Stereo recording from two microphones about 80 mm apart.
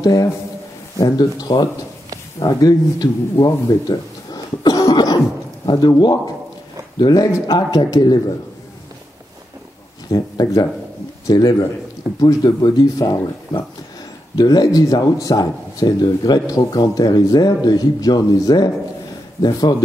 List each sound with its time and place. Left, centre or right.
0.0 s a man's voice: left
10.0 s speech: left